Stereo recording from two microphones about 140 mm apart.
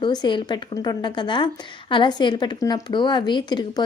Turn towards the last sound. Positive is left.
turn(degrees=35)  # may be behind; listen again after turning